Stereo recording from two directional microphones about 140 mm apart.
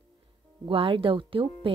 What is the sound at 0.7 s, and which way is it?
Speech, 40° right (ahead or behind).